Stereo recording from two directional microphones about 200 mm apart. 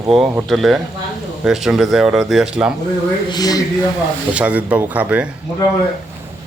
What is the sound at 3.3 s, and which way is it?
Speech, 20° left (ahead or behind).